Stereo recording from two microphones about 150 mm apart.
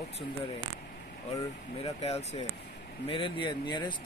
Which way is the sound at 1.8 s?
40° left (ahead or behind).